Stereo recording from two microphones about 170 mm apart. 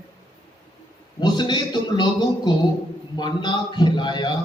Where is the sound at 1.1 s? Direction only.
25° left (ahead or behind).